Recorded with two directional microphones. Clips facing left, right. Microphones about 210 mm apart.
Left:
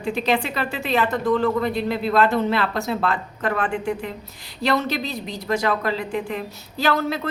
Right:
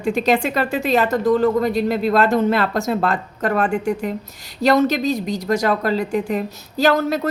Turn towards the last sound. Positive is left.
turn(degrees=-45)  # may be behind; listen again after turning